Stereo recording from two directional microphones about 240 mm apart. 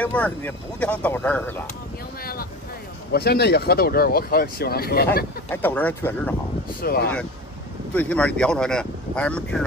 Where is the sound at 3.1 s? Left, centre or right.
Left.